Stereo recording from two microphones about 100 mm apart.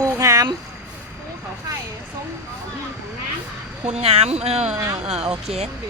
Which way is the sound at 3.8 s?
90° right.